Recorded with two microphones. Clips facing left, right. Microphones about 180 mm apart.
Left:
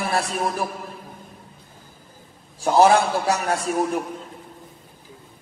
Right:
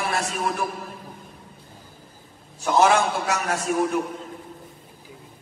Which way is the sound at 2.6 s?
35° left (ahead or behind).